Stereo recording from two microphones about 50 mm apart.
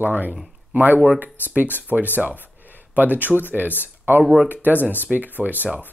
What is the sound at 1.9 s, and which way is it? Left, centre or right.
Speech, right.